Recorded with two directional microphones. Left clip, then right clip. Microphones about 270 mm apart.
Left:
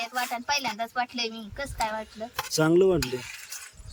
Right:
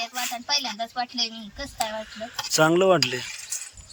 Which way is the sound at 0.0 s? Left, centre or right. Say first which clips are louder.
Even; centre.